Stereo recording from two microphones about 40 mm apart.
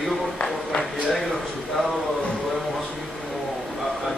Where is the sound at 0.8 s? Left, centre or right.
Centre.